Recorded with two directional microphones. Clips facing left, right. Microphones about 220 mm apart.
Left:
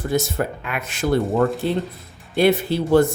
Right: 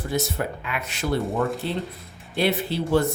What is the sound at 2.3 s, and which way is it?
Speech, 45° left (ahead or behind).